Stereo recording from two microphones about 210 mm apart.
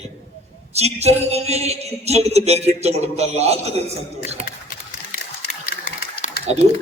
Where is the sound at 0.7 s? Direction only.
30° right (ahead or behind).